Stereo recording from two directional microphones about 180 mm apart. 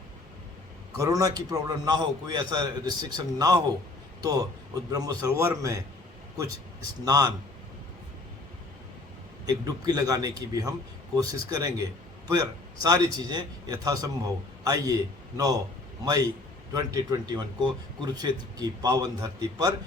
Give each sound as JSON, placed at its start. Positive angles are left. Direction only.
{"t": 0.9, "sound": "a man's voice", "side_deg": -20}
{"t": 9.5, "sound": "a man's voice", "side_deg": -20}